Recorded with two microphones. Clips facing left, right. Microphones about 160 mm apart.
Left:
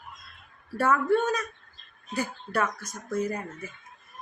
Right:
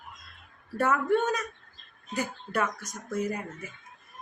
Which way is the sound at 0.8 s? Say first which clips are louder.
Left 2 dB; 20° right (ahead or behind).